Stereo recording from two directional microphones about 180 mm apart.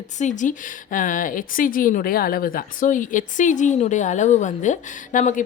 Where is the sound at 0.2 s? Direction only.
45° left (ahead or behind).